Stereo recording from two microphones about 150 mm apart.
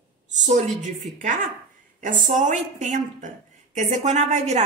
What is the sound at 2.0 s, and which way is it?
A woman's voice, 55° right (ahead or behind).